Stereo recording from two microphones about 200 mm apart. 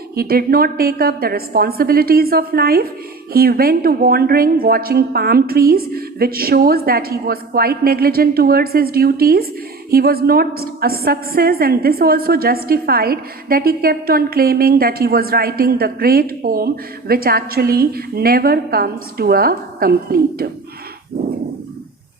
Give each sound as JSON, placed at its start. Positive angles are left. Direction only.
{"t": 0.1, "sound": "a woman's voice", "side_deg": -50}